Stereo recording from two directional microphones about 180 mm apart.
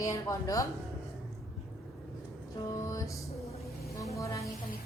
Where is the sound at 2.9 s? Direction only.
20° left (ahead or behind).